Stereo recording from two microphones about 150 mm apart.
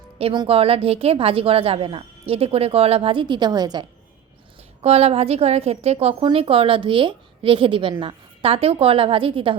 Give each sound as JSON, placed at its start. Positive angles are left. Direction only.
{"t": 0.2, "sound": "a woman's voice", "side_deg": -40}
{"t": 4.8, "sound": "a woman's voice", "side_deg": -45}